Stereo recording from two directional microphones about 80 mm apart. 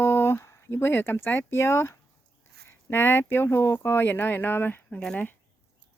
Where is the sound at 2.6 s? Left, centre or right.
Left.